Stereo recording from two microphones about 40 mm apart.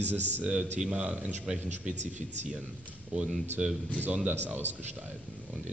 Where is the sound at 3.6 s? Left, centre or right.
Right.